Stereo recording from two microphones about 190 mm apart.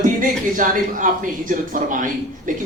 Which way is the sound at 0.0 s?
45° right (ahead or behind).